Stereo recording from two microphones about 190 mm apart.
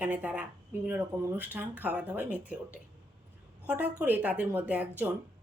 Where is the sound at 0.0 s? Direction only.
10° right (ahead or behind).